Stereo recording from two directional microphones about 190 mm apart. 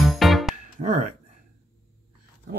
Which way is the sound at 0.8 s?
40° right (ahead or behind).